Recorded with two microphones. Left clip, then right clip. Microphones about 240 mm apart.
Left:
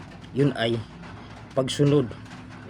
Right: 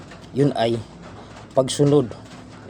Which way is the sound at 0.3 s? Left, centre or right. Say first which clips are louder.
Right 4 dB; centre.